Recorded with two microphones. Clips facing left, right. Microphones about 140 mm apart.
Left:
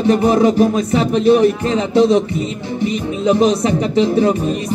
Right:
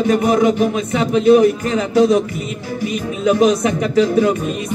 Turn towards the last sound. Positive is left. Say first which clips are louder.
# even
turn(degrees=30)  # may be behind; listen again after turning